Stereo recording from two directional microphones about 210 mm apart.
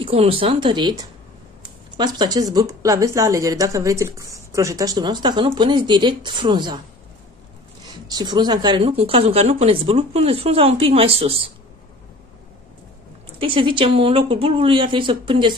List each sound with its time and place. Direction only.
0.0 s a woman's voice: 25° right (ahead or behind)
2.0 s a woman's voice: 20° right (ahead or behind)
8.1 s a woman's voice: 20° right (ahead or behind)
13.4 s a woman's voice: 25° right (ahead or behind)